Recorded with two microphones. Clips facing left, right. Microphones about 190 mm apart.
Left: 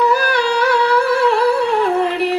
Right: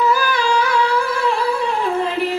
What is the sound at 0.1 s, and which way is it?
Humming, 65° left (ahead or behind).